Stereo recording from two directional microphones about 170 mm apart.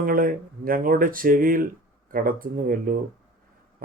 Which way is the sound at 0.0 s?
55° right (ahead or behind).